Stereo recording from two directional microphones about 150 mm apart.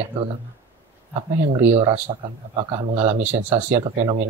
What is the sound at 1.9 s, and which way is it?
Speech, 40° right (ahead or behind).